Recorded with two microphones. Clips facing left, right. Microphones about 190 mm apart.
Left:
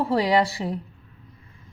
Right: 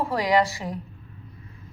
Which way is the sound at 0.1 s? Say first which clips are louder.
Left 1 dB; 30° left (ahead or behind).